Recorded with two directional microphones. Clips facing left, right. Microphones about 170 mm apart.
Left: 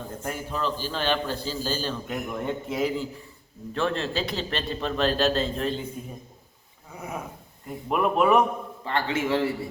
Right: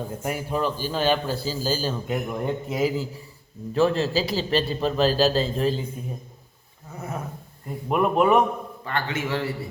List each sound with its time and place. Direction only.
0.2 s a man's voice: 10° right (ahead or behind)
6.9 s a sound: 10° left (ahead or behind)
7.7 s a man's voice: centre (ahead or behind)
8.8 s a man's voice: 25° left (ahead or behind)